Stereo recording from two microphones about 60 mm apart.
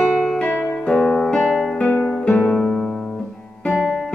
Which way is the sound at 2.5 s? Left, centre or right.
Centre.